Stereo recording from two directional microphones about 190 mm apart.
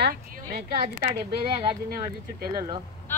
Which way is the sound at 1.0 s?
25° right (ahead or behind).